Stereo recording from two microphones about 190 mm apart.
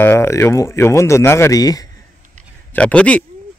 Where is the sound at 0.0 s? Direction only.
15° left (ahead or behind).